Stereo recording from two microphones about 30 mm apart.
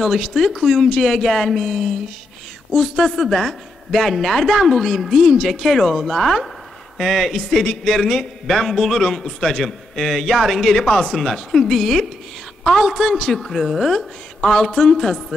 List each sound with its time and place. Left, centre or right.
0.0 s speech: centre
7.3 s speech: centre
9.0 s speech: centre
9.4 s speech: centre
10.7 s speech: centre
11.1 s speech: centre
13.2 s speech: centre
14.4 s speech: centre